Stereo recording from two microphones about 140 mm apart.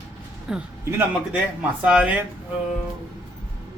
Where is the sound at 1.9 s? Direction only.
10° right (ahead or behind).